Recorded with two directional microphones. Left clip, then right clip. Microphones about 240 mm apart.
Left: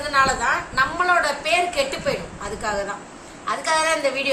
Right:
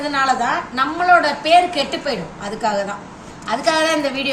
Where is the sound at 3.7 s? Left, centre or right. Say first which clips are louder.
Right 4 dB; centre.